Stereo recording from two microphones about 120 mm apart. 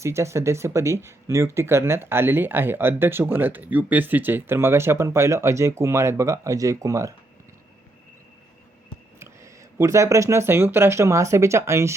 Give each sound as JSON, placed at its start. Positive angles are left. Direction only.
{"t": 0.0, "sound": "speech", "side_deg": -25}
{"t": 9.1, "sound": "speech", "side_deg": -20}